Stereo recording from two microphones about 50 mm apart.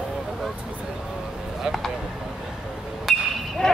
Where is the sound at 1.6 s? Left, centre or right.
Centre.